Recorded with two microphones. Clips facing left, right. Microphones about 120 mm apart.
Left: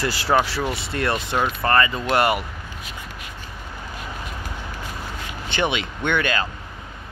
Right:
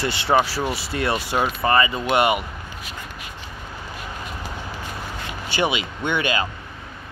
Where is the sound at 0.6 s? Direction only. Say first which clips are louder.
Even; 5° right (ahead or behind).